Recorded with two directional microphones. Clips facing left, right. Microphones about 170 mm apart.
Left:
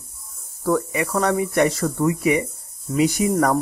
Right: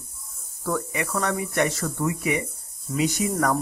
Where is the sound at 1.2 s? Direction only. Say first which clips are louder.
Left 6 dB; 25° left (ahead or behind).